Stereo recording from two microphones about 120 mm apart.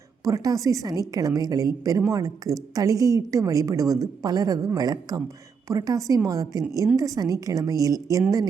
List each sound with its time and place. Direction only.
0.3 s a woman's voice: 25° right (ahead or behind)